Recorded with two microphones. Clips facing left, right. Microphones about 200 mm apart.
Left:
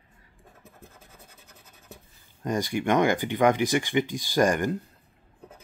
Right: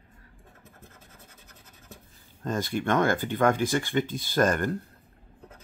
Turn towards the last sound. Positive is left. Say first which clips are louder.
# left 1 dB
turn(degrees=15)  # may be behind; listen again after turning